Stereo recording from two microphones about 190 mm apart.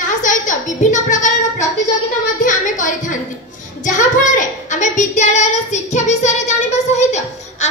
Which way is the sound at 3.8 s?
40° left (ahead or behind).